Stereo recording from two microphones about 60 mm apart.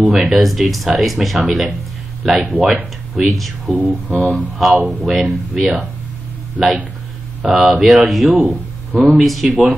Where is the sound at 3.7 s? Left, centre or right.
Right.